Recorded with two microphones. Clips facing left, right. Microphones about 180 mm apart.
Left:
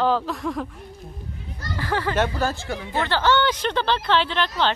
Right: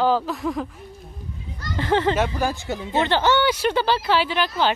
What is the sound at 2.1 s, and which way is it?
Speech, 10° right (ahead or behind).